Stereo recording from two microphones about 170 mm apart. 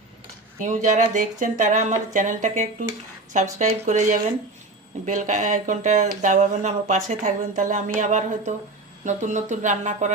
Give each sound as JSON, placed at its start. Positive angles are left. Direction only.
{"t": 0.6, "sound": "speech", "side_deg": -45}